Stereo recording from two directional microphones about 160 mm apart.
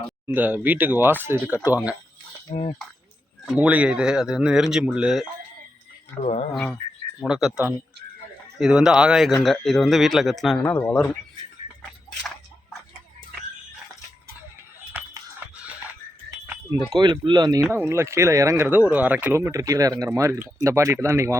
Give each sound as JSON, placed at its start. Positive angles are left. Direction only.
{"t": 0.3, "sound": "speech", "side_deg": -10}
{"t": 2.5, "sound": "speech", "side_deg": 40}
{"t": 3.4, "sound": "speech", "side_deg": -5}
{"t": 6.2, "sound": "speech", "side_deg": 40}
{"t": 7.3, "sound": "speech", "side_deg": -5}
{"t": 10.7, "sound": "speech", "side_deg": 15}
{"t": 14.9, "sound": "a sound", "side_deg": -5}
{"t": 16.9, "sound": "speech", "side_deg": -30}